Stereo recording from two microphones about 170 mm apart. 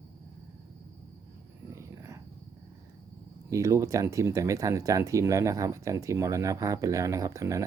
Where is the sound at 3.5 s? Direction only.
20° right (ahead or behind).